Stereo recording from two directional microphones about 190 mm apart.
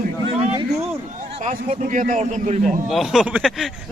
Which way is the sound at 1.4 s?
40° right (ahead or behind).